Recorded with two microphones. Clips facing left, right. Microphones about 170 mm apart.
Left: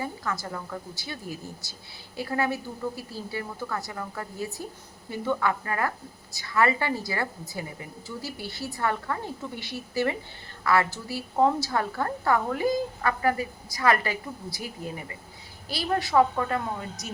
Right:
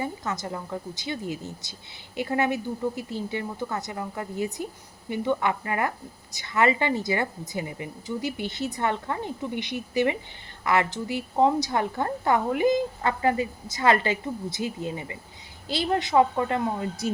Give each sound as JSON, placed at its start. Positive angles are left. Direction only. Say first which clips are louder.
{"t": 0.0, "sound": "a woman's voice", "louder": "right 2 dB", "side_deg": -20}